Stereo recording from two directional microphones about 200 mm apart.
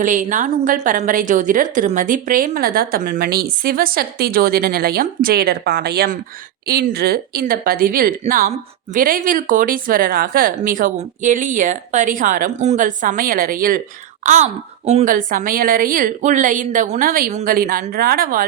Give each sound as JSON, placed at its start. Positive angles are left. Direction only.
{"t": 0.0, "sound": "speech", "side_deg": -40}